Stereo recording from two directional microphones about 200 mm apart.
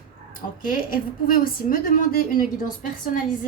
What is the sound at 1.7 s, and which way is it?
A woman's voice, 40° left (ahead or behind).